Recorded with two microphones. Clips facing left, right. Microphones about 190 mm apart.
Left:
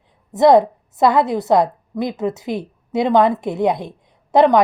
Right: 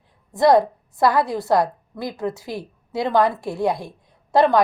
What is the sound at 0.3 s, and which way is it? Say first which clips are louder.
A woman's voice: left 4 dB; 20° left (ahead or behind).